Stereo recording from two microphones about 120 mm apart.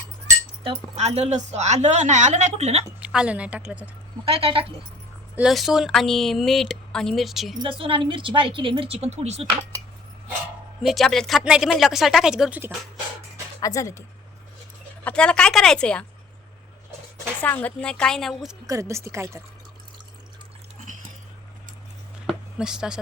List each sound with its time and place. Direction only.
0.9 s a woman's voice: 65° right (ahead or behind)
3.0 s a woman's voice: 10° right (ahead or behind)
4.3 s speech: 50° right (ahead or behind)
5.4 s speech: centre (ahead or behind)
7.6 s speech: 45° right (ahead or behind); by 9.5 s 65° right (ahead or behind)
10.8 s speech: centre (ahead or behind)
13.6 s speech: 30° left (ahead or behind)
15.0 s a woman's voice: 10° left (ahead or behind)
17.4 s a woman's voice: 15° left (ahead or behind)
18.6 s speech: 25° right (ahead or behind)
22.3 s a sound: 5° right (ahead or behind)